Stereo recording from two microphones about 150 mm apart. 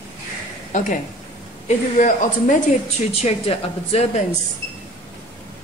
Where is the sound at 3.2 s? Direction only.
45° left (ahead or behind).